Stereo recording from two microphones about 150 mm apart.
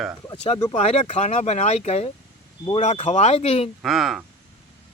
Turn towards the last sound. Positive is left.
turn(degrees=0)  # may be behind; listen again after turning